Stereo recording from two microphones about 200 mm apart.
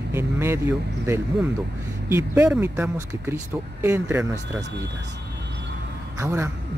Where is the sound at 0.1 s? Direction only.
10° right (ahead or behind).